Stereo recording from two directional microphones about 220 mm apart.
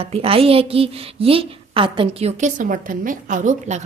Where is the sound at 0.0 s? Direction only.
25° right (ahead or behind).